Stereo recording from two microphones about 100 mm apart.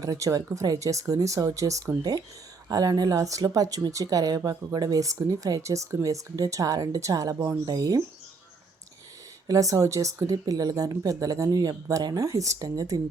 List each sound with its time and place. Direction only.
0.0 s speech: 35° right (ahead or behind)
9.5 s speech: 35° right (ahead or behind)